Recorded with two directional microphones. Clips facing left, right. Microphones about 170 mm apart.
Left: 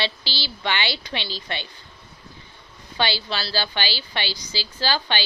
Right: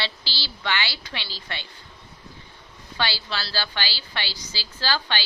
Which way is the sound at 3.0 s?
20° left (ahead or behind).